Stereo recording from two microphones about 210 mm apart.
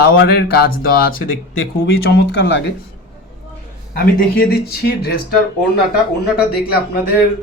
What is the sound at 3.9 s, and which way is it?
Speech, 45° left (ahead or behind).